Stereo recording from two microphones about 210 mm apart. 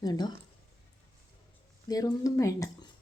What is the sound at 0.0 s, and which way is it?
Speech, 20° left (ahead or behind).